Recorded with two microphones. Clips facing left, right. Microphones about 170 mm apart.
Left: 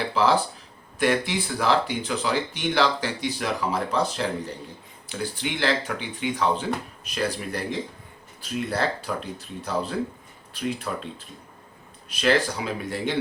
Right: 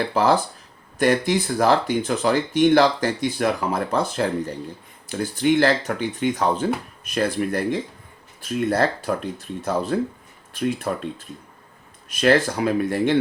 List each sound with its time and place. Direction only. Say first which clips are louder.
0.1 s speech: even; 45° right (ahead or behind)
12.0 s speech: right 4 dB; 50° right (ahead or behind)